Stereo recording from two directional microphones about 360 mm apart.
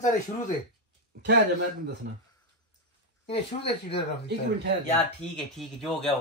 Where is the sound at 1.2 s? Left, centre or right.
Right.